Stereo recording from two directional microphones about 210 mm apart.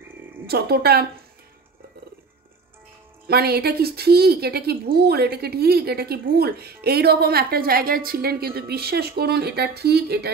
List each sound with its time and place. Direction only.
0.5 s a woman's voice: 50° right (ahead or behind)
3.3 s a woman's voice: 50° right (ahead or behind)